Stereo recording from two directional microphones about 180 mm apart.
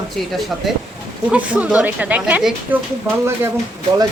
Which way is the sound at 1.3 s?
10° right (ahead or behind).